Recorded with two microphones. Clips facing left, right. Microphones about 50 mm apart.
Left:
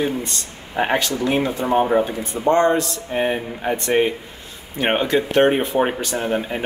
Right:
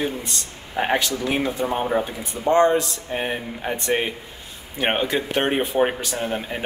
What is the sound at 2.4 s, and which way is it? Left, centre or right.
Speech, left.